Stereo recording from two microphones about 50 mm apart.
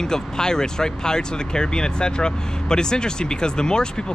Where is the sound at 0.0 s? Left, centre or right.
Centre.